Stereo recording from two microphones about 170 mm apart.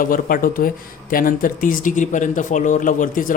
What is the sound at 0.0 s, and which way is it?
Speech, 55° left (ahead or behind).